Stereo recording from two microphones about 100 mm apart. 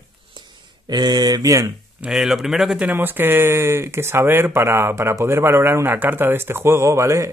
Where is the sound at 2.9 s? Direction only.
20° right (ahead or behind).